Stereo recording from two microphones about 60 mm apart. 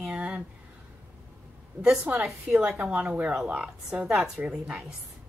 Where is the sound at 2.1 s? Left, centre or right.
Right.